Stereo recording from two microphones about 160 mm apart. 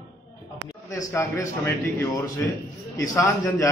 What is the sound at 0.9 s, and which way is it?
A man's voice, 20° left (ahead or behind).